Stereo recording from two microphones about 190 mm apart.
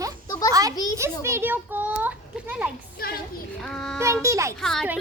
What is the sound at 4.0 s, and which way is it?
Speech, 15° right (ahead or behind).